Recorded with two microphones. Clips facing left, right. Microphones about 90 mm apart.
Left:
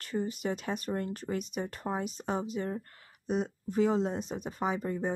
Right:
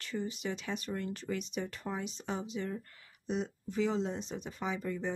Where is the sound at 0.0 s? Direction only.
45° left (ahead or behind).